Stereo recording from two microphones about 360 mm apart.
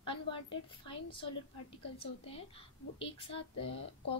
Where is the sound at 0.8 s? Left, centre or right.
Centre.